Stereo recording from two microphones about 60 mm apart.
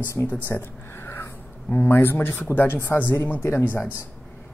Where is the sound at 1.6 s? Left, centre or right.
Left.